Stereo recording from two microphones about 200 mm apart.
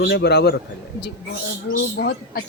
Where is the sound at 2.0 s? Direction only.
55° left (ahead or behind).